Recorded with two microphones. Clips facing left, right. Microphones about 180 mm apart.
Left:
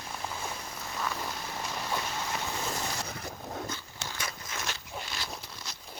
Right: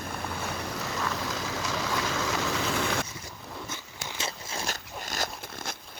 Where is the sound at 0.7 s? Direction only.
80° right.